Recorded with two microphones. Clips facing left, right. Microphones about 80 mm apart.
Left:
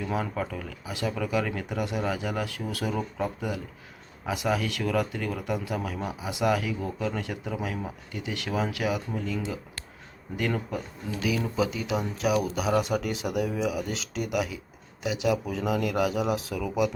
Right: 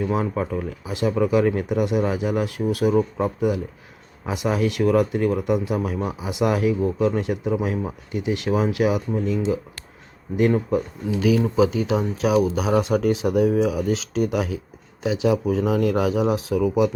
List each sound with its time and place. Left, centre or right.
0.0 s speech: right
1.7 s speech: centre
4.3 s speech: right